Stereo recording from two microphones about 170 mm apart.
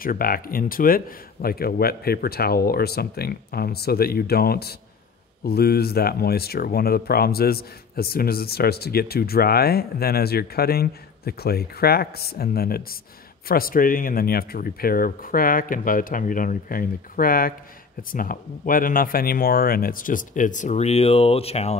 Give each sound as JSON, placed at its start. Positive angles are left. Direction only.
{"t": 0.0, "sound": "speech", "side_deg": 60}